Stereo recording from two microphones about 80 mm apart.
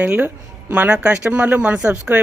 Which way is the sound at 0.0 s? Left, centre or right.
Right.